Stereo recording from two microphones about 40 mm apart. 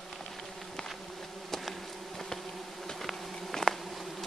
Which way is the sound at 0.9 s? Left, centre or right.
Centre.